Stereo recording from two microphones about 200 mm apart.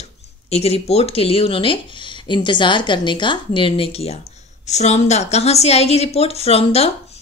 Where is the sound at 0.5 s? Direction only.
30° left (ahead or behind).